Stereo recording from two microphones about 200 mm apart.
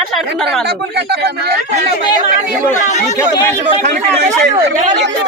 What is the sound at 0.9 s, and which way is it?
Speech, 55° right (ahead or behind).